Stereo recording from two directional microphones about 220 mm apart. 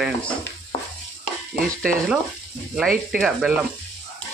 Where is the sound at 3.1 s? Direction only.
Centre (ahead or behind).